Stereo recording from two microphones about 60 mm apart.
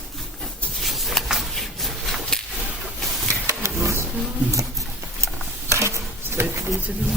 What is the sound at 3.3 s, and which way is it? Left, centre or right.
Wild animals, right.